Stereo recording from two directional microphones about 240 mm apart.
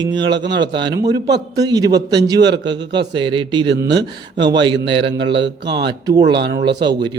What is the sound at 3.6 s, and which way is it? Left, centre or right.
A man's voice, right.